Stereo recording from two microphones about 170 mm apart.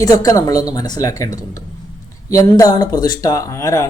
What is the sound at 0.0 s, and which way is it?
Speech, 20° left (ahead or behind).